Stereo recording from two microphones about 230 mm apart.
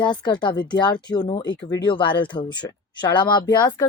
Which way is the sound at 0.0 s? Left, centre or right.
Centre.